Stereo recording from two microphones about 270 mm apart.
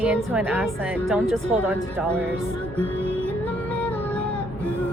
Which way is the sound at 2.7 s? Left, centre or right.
Centre.